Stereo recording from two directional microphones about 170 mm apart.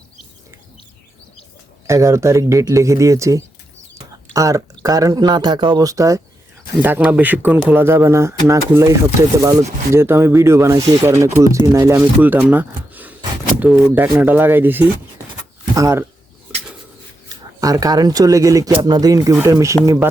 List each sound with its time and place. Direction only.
1.9 s speech: 15° right (ahead or behind)
17.2 s speech: 20° right (ahead or behind)